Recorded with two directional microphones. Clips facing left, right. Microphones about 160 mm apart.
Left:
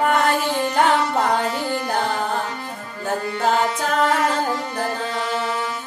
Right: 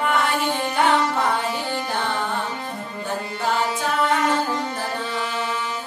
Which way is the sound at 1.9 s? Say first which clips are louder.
Left 4 dB; 40° left (ahead or behind).